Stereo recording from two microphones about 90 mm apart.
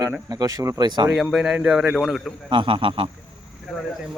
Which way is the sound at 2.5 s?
70° right (ahead or behind).